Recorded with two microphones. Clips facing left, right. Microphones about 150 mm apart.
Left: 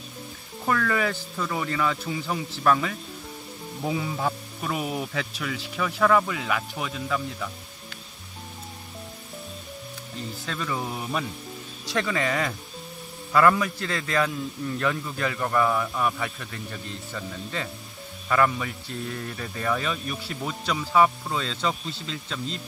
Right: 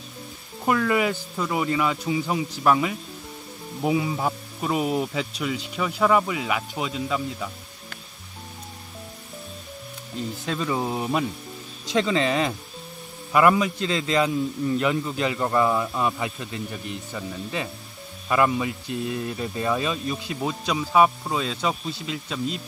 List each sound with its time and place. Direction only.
0.7 s speech: 15° right (ahead or behind)
10.4 s speech: 20° right (ahead or behind)